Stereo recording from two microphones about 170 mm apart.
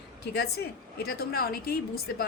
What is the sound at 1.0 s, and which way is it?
A woman's voice, 65° left (ahead or behind).